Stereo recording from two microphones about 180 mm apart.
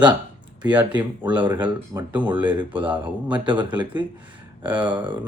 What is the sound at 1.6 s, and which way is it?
Speech, 25° right (ahead or behind).